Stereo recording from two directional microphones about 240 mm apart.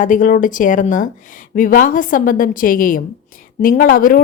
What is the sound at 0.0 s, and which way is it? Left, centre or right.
Speech, left.